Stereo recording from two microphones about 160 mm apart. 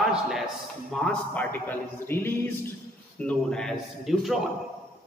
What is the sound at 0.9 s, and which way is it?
A man's voice, 5° left (ahead or behind).